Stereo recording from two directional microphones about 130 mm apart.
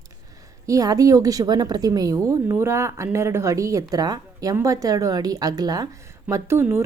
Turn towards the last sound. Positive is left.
turn(degrees=-20)  # may be behind; listen again after turning